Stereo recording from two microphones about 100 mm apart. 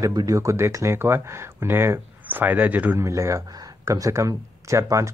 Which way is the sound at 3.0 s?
30° right (ahead or behind).